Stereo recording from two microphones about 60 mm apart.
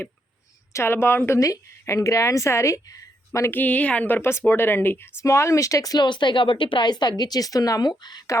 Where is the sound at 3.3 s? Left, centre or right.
Left.